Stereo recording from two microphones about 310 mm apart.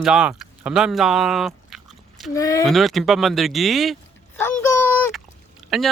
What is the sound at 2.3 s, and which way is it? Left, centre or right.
Speech, centre.